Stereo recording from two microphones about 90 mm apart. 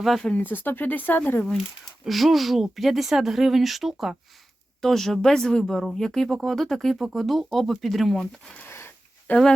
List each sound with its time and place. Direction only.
0.0 s speech: 5° left (ahead or behind)
0.3 s speech: 20° left (ahead or behind)
2.0 s speech: centre (ahead or behind)
8.5 s a sound: 25° left (ahead or behind)